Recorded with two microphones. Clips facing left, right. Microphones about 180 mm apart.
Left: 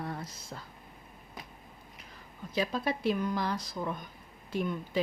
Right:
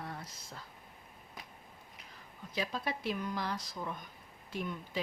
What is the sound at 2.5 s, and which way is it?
Speech, 45° left (ahead or behind).